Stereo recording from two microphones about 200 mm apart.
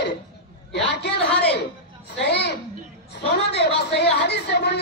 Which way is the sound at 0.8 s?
55° left (ahead or behind).